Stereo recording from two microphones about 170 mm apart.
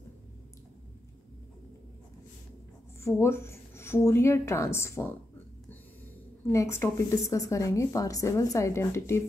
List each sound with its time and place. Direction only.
3.0 s speech: 15° left (ahead or behind)
6.4 s a woman's voice: 15° left (ahead or behind)